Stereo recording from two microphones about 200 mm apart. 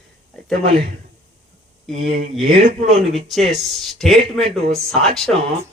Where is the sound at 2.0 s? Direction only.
35° right (ahead or behind).